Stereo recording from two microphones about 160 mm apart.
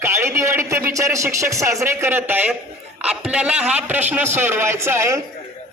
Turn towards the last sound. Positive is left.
turn(degrees=-15)  # may be behind; listen again after turning